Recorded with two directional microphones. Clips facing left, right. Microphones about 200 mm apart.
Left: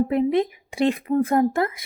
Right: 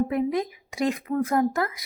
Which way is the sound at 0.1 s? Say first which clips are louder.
Left 5 dB; 25° left (ahead or behind).